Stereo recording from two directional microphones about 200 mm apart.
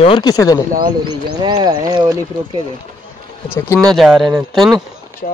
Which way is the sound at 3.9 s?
Centre (ahead or behind).